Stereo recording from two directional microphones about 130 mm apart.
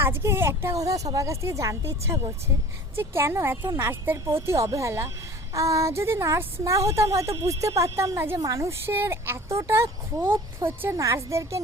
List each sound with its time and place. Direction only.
0.0 s speech: 20° right (ahead or behind)